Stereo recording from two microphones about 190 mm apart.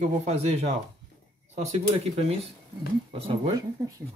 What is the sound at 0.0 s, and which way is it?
Speech, 35° right (ahead or behind).